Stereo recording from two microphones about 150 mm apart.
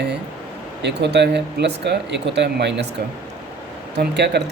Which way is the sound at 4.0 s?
90° right.